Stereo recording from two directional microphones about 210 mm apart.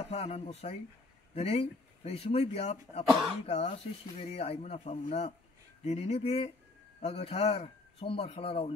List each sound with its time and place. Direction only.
0.1 s speech: 30° left (ahead or behind)